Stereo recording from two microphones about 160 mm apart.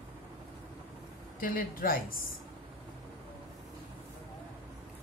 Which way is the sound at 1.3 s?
65° left (ahead or behind).